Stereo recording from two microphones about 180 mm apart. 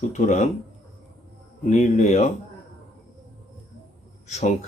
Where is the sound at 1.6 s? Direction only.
40° left (ahead or behind).